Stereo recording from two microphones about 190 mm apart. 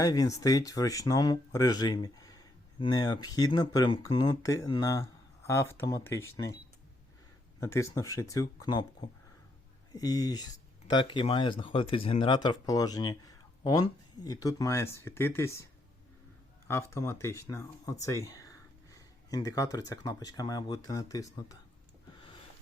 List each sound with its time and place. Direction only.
0.0 s speech: 20° left (ahead or behind)
7.6 s speech: 15° left (ahead or behind)
16.6 s speech: 15° left (ahead or behind)
18.9 s a sound: 20° left (ahead or behind)
19.9 s speech: 20° left (ahead or behind)